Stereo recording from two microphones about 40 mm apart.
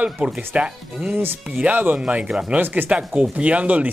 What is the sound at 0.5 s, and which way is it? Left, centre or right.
Speech, right.